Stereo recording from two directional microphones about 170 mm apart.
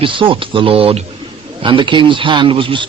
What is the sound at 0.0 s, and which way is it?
Speech, 30° right (ahead or behind).